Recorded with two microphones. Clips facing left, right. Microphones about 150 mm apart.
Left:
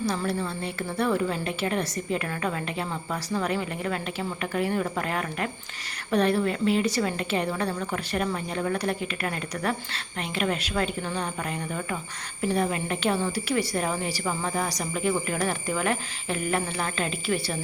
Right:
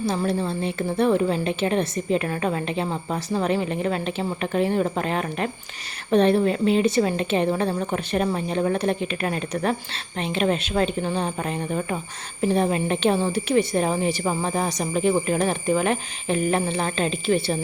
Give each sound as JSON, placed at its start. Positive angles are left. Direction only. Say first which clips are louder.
{"t": 0.3, "sound": "speech", "louder": "right 5 dB", "side_deg": -20}